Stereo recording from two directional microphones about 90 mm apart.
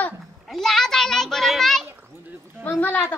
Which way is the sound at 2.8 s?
20° left (ahead or behind).